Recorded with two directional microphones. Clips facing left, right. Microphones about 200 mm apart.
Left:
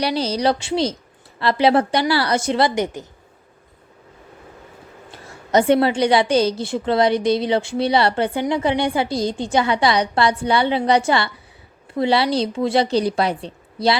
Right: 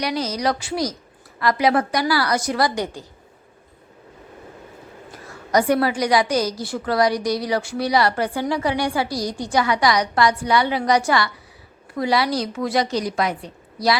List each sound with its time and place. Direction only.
0.0 s a woman's voice: 30° left (ahead or behind)
5.1 s a woman's voice: 25° left (ahead or behind)